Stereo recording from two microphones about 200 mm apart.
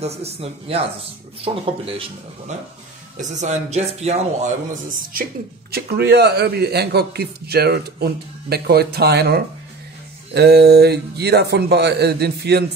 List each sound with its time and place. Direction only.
0.0 s a man's voice: 30° right (ahead or behind)
4.8 s a man's voice: 45° right (ahead or behind)